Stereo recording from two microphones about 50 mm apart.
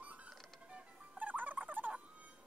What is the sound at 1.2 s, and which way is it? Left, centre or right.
Rodents, right.